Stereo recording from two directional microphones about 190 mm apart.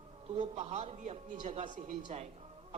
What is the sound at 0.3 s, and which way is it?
A woman's voice, 35° right (ahead or behind).